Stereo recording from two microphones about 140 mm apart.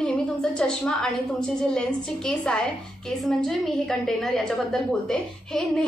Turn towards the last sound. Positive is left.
turn(degrees=5)  # may be behind; listen again after turning